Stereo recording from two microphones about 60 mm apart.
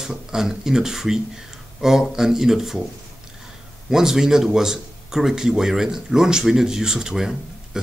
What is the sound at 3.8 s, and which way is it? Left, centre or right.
Speech, centre.